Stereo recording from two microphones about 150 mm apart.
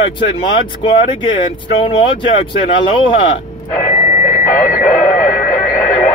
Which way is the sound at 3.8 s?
55° left (ahead or behind).